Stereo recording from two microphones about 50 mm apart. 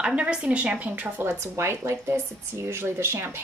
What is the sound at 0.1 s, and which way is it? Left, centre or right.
Speech, right.